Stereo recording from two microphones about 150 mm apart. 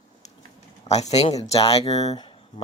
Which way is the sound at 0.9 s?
45° left (ahead or behind).